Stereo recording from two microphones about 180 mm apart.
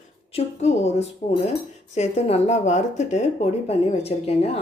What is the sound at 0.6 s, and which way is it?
Speech, 35° left (ahead or behind).